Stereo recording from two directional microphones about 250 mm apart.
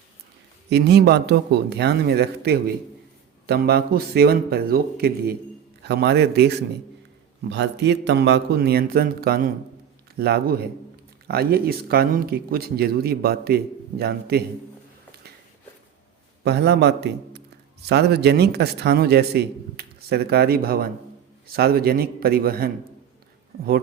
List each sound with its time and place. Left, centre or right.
0.7 s a man's voice: right
16.4 s a man's voice: right